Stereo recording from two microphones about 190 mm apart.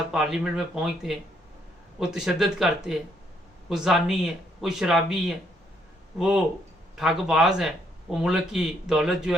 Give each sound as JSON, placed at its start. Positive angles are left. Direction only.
{"t": 0.1, "sound": "a man's voice", "side_deg": -5}